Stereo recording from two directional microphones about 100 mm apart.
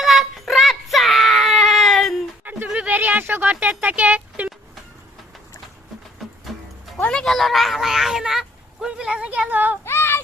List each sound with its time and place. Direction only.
0.0 s child singing: centre (ahead or behind)
2.4 s a sound: 15° right (ahead or behind)
6.5 s music: centre (ahead or behind)
7.0 s speech: 5° left (ahead or behind); by 9.7 s 15° right (ahead or behind)
9.8 s child singing: 25° left (ahead or behind)